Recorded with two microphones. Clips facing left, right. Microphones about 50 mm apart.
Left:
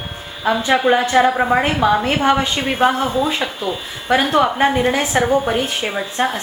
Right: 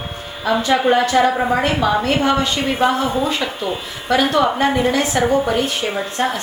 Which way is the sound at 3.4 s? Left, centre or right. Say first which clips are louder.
Even; left.